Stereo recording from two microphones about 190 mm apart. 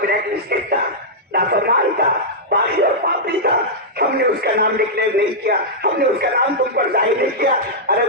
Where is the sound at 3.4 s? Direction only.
55° right (ahead or behind).